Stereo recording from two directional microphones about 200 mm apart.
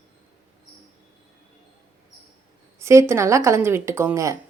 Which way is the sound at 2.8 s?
15° right (ahead or behind).